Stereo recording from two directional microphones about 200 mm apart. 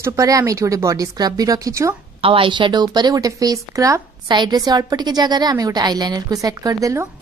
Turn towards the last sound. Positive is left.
turn(degrees=-15)  # may be behind; listen again after turning